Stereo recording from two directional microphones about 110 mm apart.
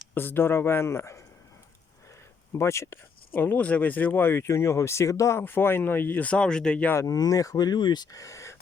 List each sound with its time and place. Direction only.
0.1 s speech: 20° left (ahead or behind)
2.5 s speech: 25° left (ahead or behind)
6.9 s speech: 30° left (ahead or behind)